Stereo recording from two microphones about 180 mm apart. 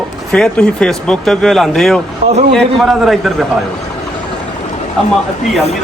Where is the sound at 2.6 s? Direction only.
Centre (ahead or behind).